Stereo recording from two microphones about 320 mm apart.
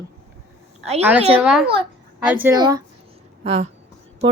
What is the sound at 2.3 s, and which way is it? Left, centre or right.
A woman's voice, centre.